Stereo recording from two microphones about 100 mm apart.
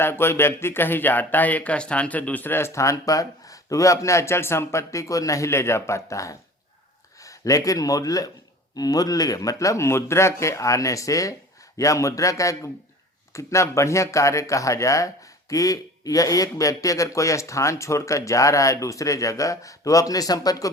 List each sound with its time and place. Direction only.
0.0 s speech: 25° left (ahead or behind)